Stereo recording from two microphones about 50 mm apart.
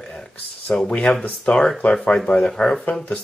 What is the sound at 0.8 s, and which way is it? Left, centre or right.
Speech, left.